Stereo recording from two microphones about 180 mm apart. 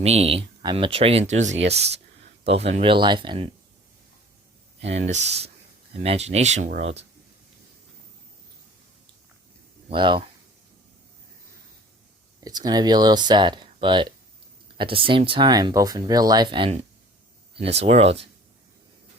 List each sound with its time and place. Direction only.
0.0 s speech: 35° right (ahead or behind)
4.9 s speech: 40° right (ahead or behind)
9.9 s speech: 25° right (ahead or behind)
12.4 s speech: 20° right (ahead or behind)